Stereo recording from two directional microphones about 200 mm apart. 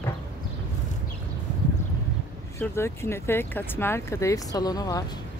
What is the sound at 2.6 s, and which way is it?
Speech, 10° left (ahead or behind).